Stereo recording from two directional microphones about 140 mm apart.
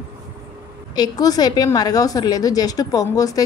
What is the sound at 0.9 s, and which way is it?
A woman's voice, 30° left (ahead or behind).